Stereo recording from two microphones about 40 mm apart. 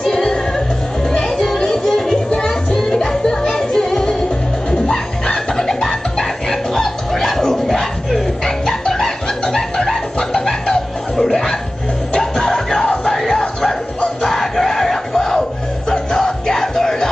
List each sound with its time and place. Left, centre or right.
0.0 s music: centre
4.6 s bird: left
8.5 s a sound: centre
11.2 s music: centre